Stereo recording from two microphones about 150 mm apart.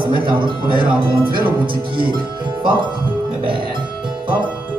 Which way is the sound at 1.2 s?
75° right (ahead or behind).